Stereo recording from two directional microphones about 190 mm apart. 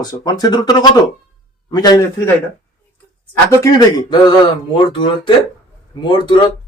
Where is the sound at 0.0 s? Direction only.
20° left (ahead or behind).